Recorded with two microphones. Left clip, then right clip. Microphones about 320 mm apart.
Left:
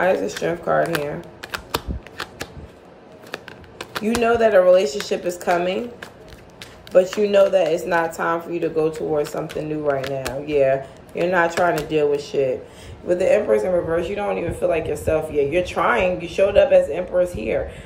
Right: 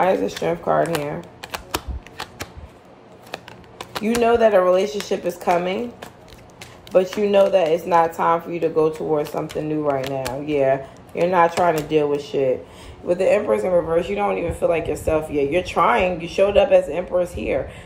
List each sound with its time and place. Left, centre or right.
0.3 s speech: centre
3.3 s speech: centre